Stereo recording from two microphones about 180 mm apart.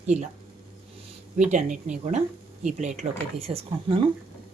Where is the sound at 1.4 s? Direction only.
40° right (ahead or behind).